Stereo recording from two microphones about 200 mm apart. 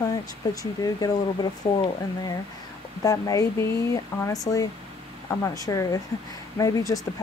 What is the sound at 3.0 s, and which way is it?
Speech, 15° left (ahead or behind).